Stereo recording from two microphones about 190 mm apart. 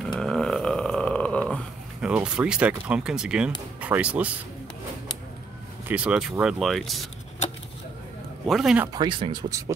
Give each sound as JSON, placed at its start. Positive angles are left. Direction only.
{"t": 0.1, "sound": "a sound", "side_deg": 5}
{"t": 3.8, "sound": "speech", "side_deg": -5}
{"t": 5.9, "sound": "speech", "side_deg": -5}
{"t": 8.5, "sound": "speech", "side_deg": 0}
{"t": 8.8, "sound": "speech", "side_deg": -20}